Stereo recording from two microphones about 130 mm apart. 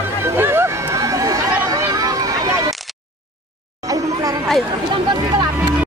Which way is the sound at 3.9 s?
30° right (ahead or behind).